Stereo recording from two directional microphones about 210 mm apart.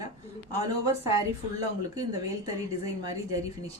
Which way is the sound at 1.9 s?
15° right (ahead or behind).